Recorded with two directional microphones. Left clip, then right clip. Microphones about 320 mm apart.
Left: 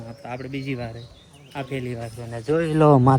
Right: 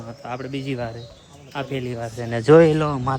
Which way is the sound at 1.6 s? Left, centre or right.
Centre.